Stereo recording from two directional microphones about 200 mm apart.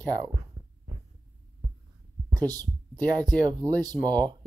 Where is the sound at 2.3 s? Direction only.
20° right (ahead or behind).